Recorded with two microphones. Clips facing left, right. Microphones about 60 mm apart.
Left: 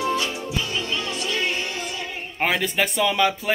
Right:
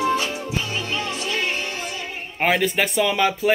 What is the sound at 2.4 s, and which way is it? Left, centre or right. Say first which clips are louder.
Speech: right 2 dB; centre.